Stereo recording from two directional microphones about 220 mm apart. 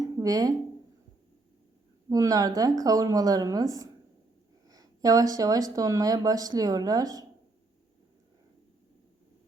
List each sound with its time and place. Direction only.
0.2 s speech: 15° right (ahead or behind)
2.0 s speech: 15° right (ahead or behind)